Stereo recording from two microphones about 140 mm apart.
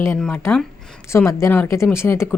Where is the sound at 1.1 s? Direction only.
20° left (ahead or behind).